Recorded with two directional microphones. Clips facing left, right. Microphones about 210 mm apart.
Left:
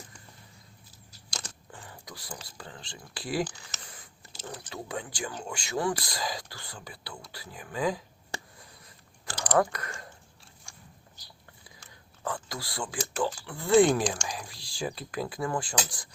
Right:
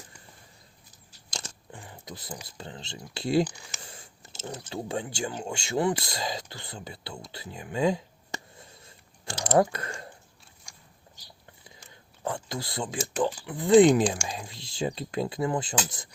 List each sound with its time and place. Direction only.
1.3 s speech: 20° right (ahead or behind)
3.4 s speech: 15° right (ahead or behind)
3.8 s speech: 25° right (ahead or behind)
8.5 s chewing: 25° right (ahead or behind)
11.9 s speech: 25° right (ahead or behind)
14.3 s speech: 25° right (ahead or behind)